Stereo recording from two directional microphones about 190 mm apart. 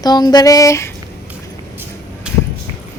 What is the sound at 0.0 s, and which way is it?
Female singing, 20° left (ahead or behind).